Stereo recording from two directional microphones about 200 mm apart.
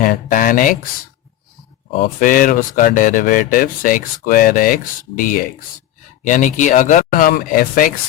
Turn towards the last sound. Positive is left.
turn(degrees=45)  # may be behind; listen again after turning